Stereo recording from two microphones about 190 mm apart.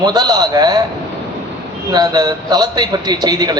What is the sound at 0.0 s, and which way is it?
Speech, 20° right (ahead or behind).